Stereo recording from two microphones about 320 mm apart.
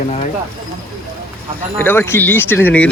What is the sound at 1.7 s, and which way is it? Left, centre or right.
Speech, centre.